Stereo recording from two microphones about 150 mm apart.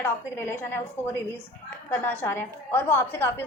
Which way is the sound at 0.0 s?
15° left (ahead or behind).